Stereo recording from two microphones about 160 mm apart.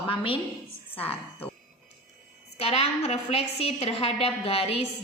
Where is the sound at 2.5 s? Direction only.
40° left (ahead or behind).